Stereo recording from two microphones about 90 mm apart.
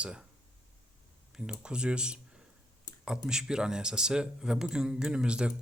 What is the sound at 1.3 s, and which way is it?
Speech, 10° right (ahead or behind).